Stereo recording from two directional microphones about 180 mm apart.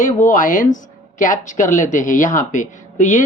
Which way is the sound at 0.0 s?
45° left (ahead or behind).